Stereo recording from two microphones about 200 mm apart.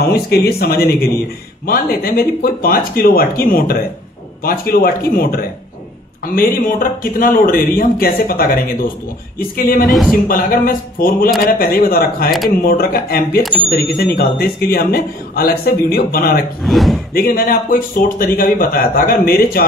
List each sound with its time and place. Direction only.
0.3 s a man's voice: 50° left (ahead or behind)
9.8 s speech: centre (ahead or behind)
10.2 s a man's voice: 45° left (ahead or behind)
16.6 s speech: centre (ahead or behind)
17.1 s a man's voice: 45° left (ahead or behind)